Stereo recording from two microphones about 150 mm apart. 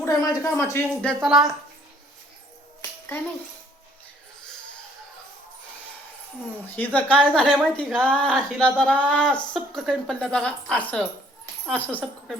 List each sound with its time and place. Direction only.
0.0 s speech: 20° left (ahead or behind)
1.0 s a woman's voice: centre (ahead or behind)
6.7 s a woman's voice: 10° left (ahead or behind)